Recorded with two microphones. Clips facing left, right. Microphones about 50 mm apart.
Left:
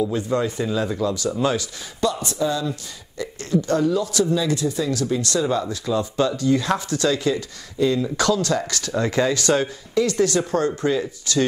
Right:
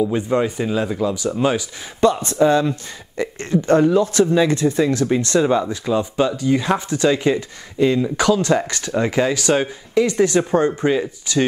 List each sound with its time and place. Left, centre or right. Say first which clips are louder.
0.0 s speech: right 3 dB; right
2.0 s speech: right 7 dB; right